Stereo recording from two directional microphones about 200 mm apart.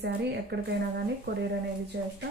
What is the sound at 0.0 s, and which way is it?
Speech, 60° right (ahead or behind).